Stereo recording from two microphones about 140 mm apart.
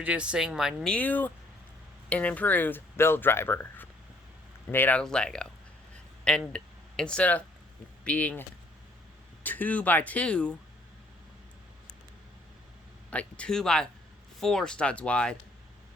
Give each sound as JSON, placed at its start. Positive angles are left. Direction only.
{"t": 0.0, "sound": "speech", "side_deg": -10}
{"t": 0.9, "sound": "speech", "side_deg": 10}
{"t": 13.1, "sound": "speech", "side_deg": 10}